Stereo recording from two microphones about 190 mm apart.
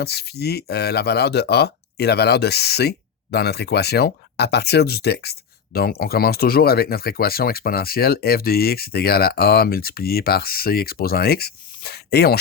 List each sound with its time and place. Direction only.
0.0 s speech: 55° left (ahead or behind)